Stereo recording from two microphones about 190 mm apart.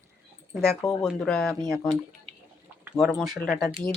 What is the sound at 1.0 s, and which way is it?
Speech, centre (ahead or behind).